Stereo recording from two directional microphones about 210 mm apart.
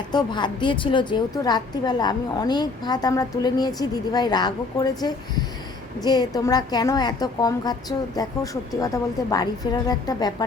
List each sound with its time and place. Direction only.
0.1 s a woman's voice: 20° left (ahead or behind)